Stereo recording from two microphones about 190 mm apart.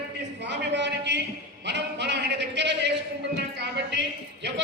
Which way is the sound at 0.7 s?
65° right (ahead or behind).